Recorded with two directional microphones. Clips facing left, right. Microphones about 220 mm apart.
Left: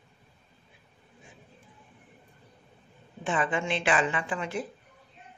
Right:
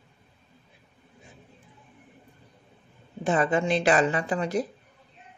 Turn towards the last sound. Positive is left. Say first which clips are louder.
# right 6 dB
turn(degrees=-40)  # may be behind; listen again after turning